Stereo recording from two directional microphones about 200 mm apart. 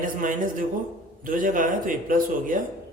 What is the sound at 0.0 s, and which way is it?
Speech, 45° right (ahead or behind).